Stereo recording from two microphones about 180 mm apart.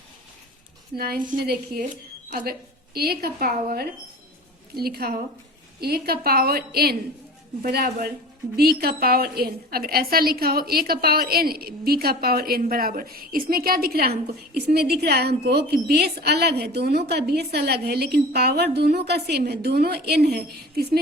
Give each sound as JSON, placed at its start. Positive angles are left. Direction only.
{"t": 0.9, "sound": "a woman's voice", "side_deg": -55}